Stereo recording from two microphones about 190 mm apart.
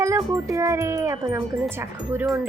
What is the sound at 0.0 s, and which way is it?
Speech, 15° right (ahead or behind).